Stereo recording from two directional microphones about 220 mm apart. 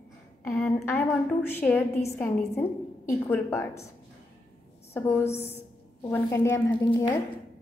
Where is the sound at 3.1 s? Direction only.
10° left (ahead or behind).